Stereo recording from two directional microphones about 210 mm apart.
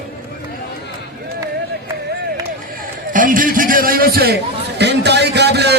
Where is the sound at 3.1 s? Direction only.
40° right (ahead or behind).